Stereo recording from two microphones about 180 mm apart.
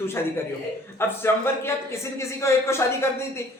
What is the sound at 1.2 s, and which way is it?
Speech, 15° left (ahead or behind).